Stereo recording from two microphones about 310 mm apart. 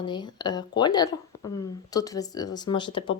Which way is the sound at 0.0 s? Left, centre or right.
Centre.